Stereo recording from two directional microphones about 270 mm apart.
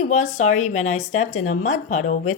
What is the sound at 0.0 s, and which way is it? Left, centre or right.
Speech, left.